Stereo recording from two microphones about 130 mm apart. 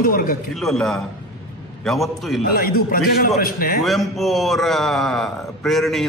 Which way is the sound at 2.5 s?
90° left.